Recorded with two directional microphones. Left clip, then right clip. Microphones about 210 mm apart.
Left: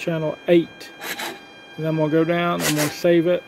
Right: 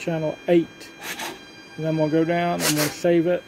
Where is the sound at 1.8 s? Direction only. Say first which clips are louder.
Left 2 dB; 15° left (ahead or behind).